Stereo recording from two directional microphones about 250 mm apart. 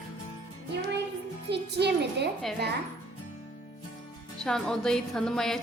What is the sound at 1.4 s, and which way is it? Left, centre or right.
Speech, right.